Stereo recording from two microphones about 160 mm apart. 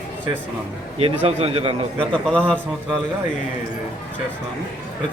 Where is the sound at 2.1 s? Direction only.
5° left (ahead or behind).